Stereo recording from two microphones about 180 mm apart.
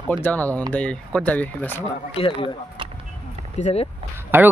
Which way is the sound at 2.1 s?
30° left (ahead or behind).